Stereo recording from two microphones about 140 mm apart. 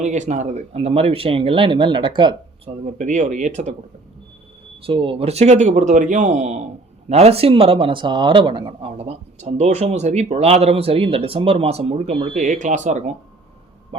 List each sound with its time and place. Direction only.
0.0 s speech: 55° right (ahead or behind); by 2.3 s 35° right (ahead or behind)
2.8 s a man's voice: 60° right (ahead or behind)
4.8 s a man's voice: 40° right (ahead or behind); by 13.1 s 60° right (ahead or behind)